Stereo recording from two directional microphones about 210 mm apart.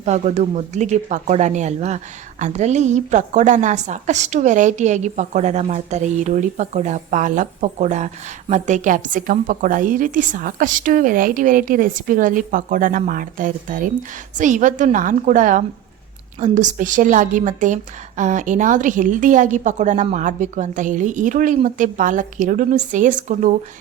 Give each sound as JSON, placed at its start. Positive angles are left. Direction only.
{"t": 0.0, "sound": "a woman's voice", "side_deg": -35}